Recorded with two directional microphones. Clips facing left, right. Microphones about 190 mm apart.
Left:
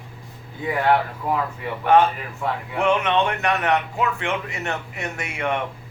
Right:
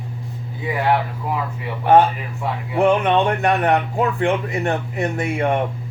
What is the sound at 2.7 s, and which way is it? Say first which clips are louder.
Speech: right 5 dB; 35° right (ahead or behind).